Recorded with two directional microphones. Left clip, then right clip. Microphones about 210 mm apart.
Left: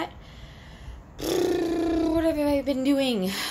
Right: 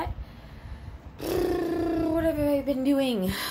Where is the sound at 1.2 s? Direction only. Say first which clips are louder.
Left 2 dB; 15° left (ahead or behind).